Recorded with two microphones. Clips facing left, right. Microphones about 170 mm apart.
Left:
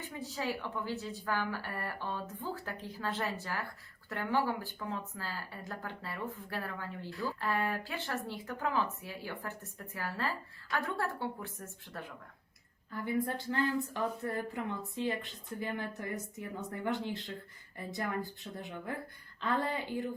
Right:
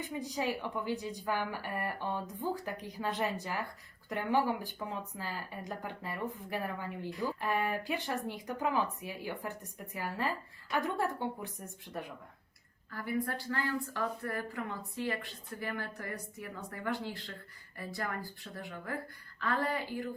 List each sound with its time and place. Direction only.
0.0 s a woman's voice: 15° right (ahead or behind)
12.9 s a woman's voice: 20° left (ahead or behind)